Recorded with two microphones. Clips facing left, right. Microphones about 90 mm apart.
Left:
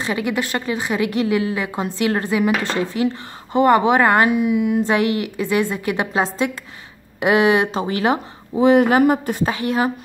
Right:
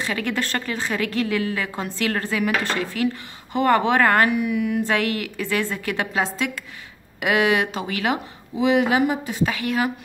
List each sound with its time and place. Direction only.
0.0 s a woman's voice: 15° left (ahead or behind)
6.2 s a woman's voice: 30° left (ahead or behind); by 9.4 s 50° left (ahead or behind)
9.4 s speech: 30° left (ahead or behind)